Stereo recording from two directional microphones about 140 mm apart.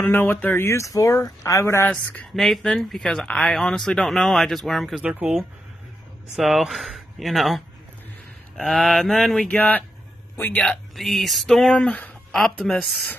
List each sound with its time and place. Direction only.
0.0 s speech: 15° left (ahead or behind)
1.9 s speech: 5° left (ahead or behind)
10.6 s speech: centre (ahead or behind)